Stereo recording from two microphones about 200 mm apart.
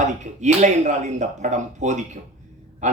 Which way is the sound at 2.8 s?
35° right (ahead or behind).